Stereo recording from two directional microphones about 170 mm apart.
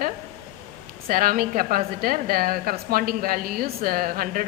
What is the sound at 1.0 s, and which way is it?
A woman's voice, 55° right (ahead or behind).